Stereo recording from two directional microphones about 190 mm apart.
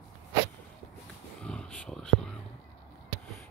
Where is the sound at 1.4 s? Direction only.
5° left (ahead or behind).